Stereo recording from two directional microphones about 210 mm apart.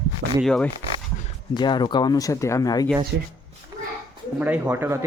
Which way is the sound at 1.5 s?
20° left (ahead or behind).